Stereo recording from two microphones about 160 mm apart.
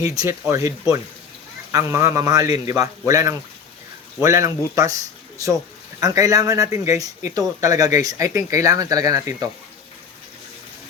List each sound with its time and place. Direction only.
0.2 s speech: 20° right (ahead or behind)
6.0 s speech: 20° right (ahead or behind)